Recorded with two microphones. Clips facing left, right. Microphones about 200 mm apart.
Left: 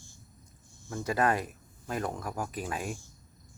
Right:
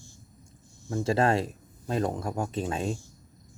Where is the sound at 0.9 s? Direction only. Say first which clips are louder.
Right 4 dB; 25° right (ahead or behind).